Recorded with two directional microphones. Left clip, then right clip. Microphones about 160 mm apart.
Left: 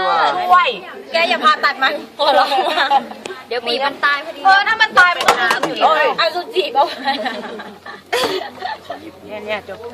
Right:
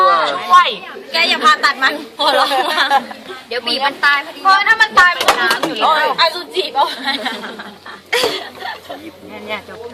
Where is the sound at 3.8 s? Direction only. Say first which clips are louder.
Right 4 dB; 50° left (ahead or behind).